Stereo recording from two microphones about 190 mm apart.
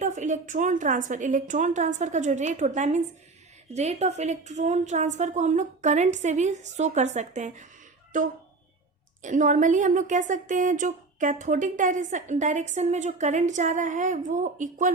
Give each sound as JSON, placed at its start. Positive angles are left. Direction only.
{"t": 0.0, "sound": "a woman's voice", "side_deg": -40}
{"t": 9.2, "sound": "a woman's voice", "side_deg": -40}